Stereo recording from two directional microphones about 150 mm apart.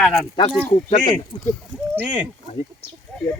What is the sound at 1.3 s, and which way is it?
Speech, 35° left (ahead or behind).